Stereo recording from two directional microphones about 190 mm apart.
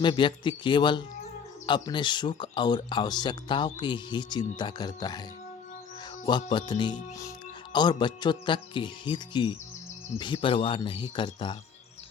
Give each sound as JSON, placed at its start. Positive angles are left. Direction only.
{"t": 0.0, "sound": "speech", "side_deg": 25}
{"t": 6.2, "sound": "speech", "side_deg": 25}